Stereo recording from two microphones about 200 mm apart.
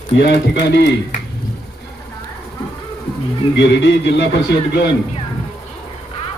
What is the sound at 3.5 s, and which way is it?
A man's voice, 60° left (ahead or behind).